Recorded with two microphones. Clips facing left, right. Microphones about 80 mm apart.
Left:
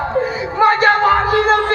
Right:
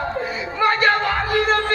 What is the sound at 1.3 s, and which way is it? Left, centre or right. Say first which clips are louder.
Music: left 5 dB; centre.